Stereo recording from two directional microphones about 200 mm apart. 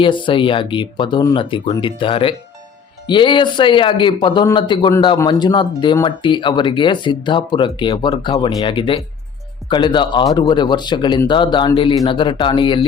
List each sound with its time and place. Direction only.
0.0 s speech: 25° left (ahead or behind)